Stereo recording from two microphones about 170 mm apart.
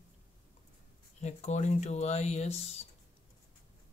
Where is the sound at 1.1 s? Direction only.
40° left (ahead or behind).